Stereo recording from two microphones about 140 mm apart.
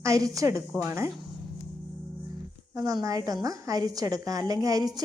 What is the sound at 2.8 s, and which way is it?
Speech, 25° right (ahead or behind).